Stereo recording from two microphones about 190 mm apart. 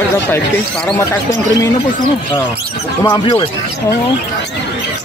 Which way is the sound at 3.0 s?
20° left (ahead or behind).